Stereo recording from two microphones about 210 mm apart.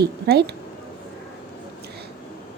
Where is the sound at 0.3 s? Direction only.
50° right (ahead or behind).